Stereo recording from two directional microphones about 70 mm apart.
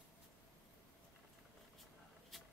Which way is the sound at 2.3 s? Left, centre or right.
Centre.